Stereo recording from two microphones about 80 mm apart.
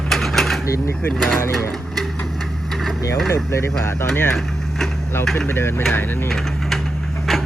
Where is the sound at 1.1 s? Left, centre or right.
Centre.